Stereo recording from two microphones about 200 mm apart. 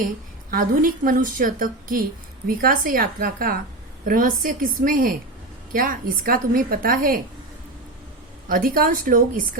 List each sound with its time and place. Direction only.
0.5 s a woman's voice: 45° right (ahead or behind)
8.4 s a woman's voice: 45° right (ahead or behind)